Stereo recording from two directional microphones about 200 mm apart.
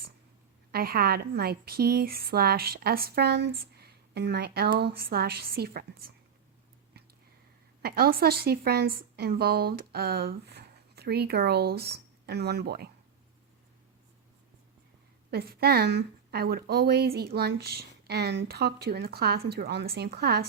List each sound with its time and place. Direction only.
0.7 s a woman's voice: 50° right (ahead or behind)
7.8 s a woman's voice: 50° right (ahead or behind)
15.3 s a woman's voice: 50° right (ahead or behind)